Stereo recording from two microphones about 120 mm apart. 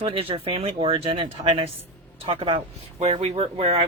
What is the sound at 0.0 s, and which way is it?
Speech, 50° right (ahead or behind).